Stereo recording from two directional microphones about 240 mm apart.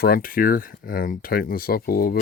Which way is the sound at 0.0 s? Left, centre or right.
Left.